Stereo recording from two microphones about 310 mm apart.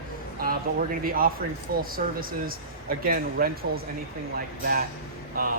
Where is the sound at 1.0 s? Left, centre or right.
Right.